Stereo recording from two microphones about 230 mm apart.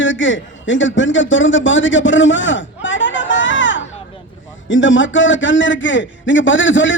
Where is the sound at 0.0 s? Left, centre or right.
Left.